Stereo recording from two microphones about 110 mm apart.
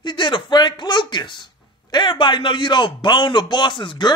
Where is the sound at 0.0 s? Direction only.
45° left (ahead or behind).